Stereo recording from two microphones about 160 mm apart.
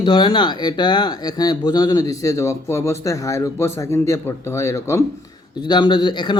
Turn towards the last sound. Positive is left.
turn(degrees=30)  # may be behind; listen again after turning